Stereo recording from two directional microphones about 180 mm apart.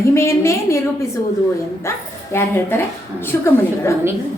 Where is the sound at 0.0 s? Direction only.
15° left (ahead or behind).